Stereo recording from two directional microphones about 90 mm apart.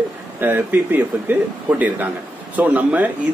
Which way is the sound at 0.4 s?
25° right (ahead or behind).